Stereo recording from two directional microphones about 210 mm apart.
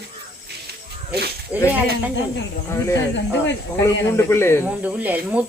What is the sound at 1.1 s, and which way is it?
Speech, 50° right (ahead or behind).